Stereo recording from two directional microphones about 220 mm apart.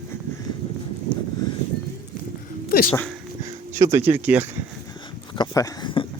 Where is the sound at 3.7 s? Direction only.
10° right (ahead or behind).